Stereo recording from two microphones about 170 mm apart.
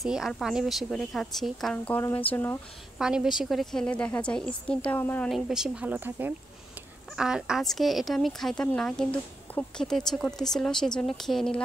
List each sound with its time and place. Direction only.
0.0 s speech: centre (ahead or behind)
3.0 s a woman's voice: 5° right (ahead or behind)
5.3 s a woman's voice: 5° right (ahead or behind)